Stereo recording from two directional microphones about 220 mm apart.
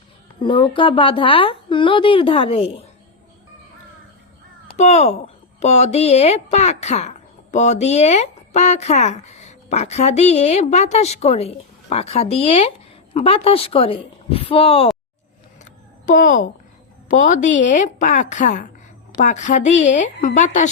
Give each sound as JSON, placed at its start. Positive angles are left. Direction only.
{"t": 0.3, "sound": "speech", "side_deg": 20}
{"t": 4.8, "sound": "speech", "side_deg": 30}
{"t": 16.0, "sound": "a woman's voice", "side_deg": 35}